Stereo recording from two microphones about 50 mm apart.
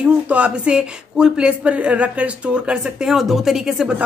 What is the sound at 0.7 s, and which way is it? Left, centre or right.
Speech, centre.